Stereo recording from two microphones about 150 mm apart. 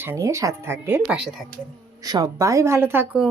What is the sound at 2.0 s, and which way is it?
Speech, 25° right (ahead or behind).